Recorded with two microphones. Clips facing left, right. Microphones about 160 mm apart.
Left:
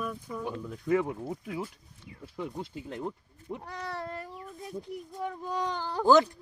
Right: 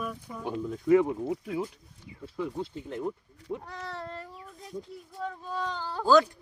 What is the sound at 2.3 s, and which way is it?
Speech, 15° left (ahead or behind).